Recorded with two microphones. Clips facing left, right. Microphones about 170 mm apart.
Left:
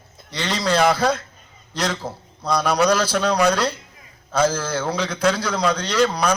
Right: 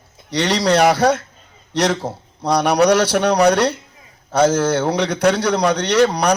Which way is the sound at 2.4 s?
70° right (ahead or behind).